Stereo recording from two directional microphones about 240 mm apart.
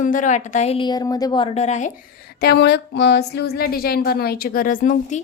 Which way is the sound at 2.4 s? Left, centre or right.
Left.